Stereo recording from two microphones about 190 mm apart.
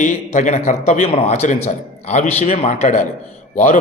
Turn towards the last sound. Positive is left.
turn(degrees=45)  # may be behind; listen again after turning